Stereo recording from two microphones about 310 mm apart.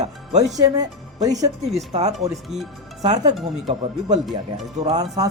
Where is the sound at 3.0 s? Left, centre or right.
Centre.